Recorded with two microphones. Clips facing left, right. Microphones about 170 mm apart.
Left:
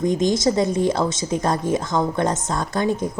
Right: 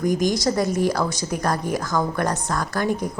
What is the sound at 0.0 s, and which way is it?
A woman's voice, 25° left (ahead or behind).